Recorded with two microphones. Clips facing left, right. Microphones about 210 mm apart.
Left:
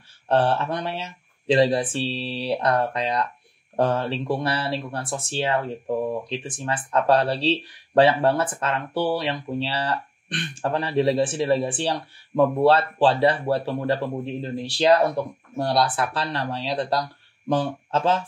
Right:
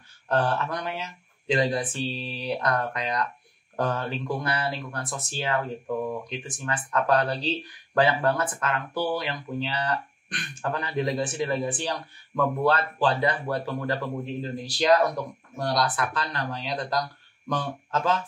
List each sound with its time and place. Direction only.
0.3 s speech: 30° left (ahead or behind)